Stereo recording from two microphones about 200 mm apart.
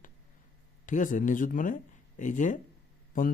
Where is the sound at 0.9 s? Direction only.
40° left (ahead or behind).